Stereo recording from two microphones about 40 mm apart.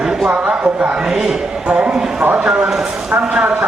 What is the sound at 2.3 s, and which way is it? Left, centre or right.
Speech, right.